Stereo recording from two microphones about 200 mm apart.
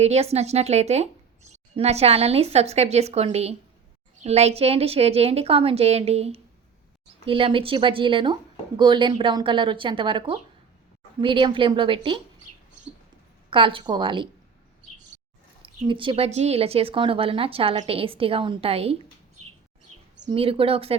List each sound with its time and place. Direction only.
0.0 s speech: 30° right (ahead or behind)
13.5 s speech: 25° right (ahead or behind)
15.9 s speech: 25° right (ahead or behind)
20.2 s speech: 30° right (ahead or behind)